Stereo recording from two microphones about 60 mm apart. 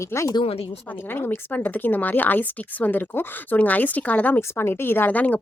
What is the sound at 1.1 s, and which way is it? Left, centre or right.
A woman's voice, left.